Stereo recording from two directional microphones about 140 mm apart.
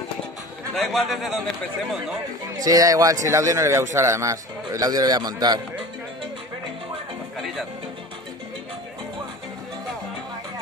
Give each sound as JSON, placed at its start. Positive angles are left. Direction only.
{"t": 0.7, "sound": "a man's voice", "side_deg": 0}
{"t": 2.4, "sound": "a man's voice", "side_deg": -25}